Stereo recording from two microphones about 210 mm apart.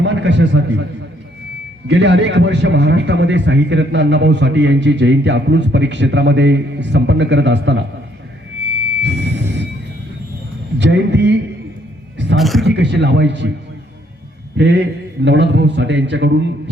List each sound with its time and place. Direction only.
0.0 s a man's voice: 55° right (ahead or behind)
1.9 s a man's voice: 55° right (ahead or behind)
9.0 s a sound: 55° right (ahead or behind)
10.8 s a sound: 55° right (ahead or behind)
12.4 s speech: centre (ahead or behind)
12.6 s a man's voice: 55° right (ahead or behind)
14.5 s a man's voice: 55° right (ahead or behind)